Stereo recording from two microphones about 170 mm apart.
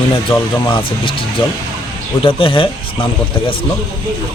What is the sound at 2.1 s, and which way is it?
Speech, 30° left (ahead or behind).